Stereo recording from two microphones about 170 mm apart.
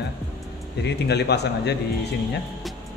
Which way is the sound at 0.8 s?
80° left.